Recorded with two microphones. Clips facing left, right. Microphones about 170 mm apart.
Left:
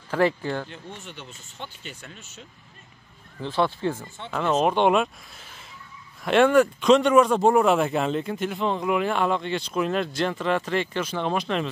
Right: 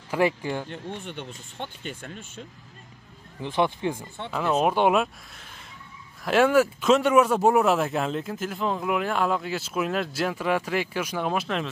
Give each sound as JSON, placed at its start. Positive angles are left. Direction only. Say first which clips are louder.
{"t": 0.1, "sound": "speech", "louder": "left 1 dB", "side_deg": -10}
{"t": 0.9, "sound": "speech", "louder": "right 5 dB", "side_deg": -55}
{"t": 3.3, "sound": "speech", "louder": "even", "side_deg": -15}
{"t": 4.3, "sound": "speech", "louder": "left 1 dB", "side_deg": 0}
{"t": 6.2, "sound": "speech", "louder": "left 2 dB", "side_deg": -5}